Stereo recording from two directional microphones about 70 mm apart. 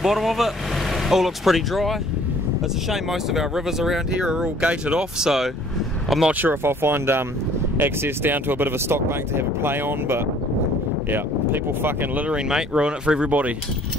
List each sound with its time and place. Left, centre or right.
0.0 s speech: centre
6.4 s speech: right
12.3 s speech: centre